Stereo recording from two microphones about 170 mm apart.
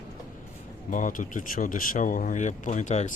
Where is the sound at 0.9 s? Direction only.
50° left (ahead or behind).